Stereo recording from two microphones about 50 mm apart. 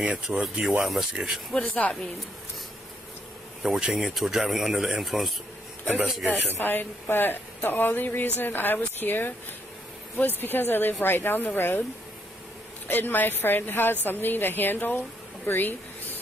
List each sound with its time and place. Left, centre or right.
0.3 s speech: right
0.8 s speech: centre
1.8 s speech: left
3.6 s speech: centre
6.6 s speech: left
12.8 s speech: left
15.4 s a sound: left